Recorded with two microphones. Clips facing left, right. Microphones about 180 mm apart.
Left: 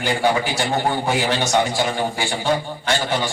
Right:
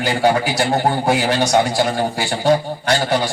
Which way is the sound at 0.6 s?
40° right (ahead or behind).